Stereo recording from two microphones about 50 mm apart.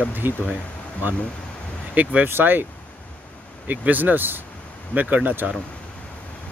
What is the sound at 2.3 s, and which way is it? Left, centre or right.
Speech, right.